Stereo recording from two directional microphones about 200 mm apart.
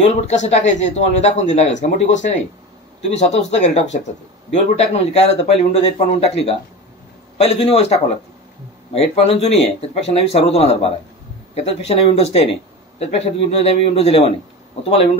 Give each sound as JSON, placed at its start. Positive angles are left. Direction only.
{"t": 0.1, "sound": "speech", "side_deg": 35}